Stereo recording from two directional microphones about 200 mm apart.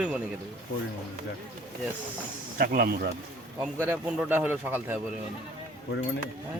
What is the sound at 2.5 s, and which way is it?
Speech, 50° right (ahead or behind).